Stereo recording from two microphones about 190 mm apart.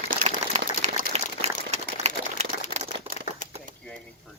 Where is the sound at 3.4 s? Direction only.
40° left (ahead or behind).